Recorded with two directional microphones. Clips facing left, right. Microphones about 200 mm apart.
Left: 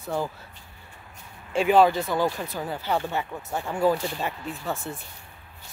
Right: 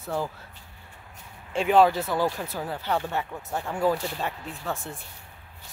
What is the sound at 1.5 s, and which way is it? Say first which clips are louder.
Speech: left 1 dB; 5° left (ahead or behind).